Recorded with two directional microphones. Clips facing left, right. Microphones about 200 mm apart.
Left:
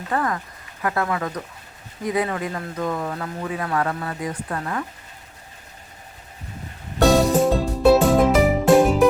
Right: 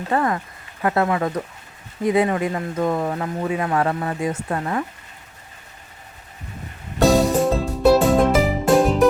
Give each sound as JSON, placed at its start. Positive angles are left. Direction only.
{"t": 0.1, "sound": "speech", "side_deg": -25}
{"t": 7.0, "sound": "music", "side_deg": 0}